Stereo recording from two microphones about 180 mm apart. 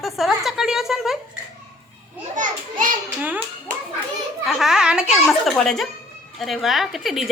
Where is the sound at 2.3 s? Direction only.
45° right (ahead or behind).